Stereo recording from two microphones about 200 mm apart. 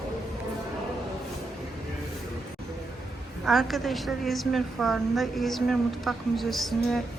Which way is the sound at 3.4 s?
Centre (ahead or behind).